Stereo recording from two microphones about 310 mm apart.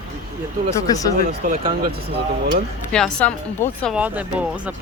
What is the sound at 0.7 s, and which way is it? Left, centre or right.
Speech, centre.